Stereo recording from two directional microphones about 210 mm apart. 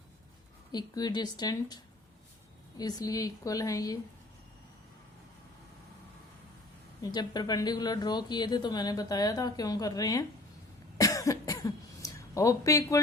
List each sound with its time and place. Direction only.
0.7 s speech: 20° left (ahead or behind)
7.0 s speech: 20° left (ahead or behind)
10.9 s cough: 15° left (ahead or behind)